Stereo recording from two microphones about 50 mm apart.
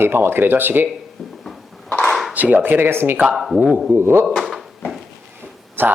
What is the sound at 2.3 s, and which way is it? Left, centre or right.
Speech, right.